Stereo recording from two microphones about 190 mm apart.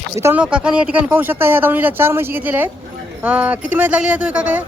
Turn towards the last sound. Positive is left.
turn(degrees=-5)  # may be behind; listen again after turning